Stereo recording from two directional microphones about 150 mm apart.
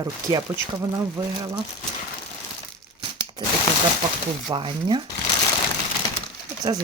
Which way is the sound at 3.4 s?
30° right (ahead or behind).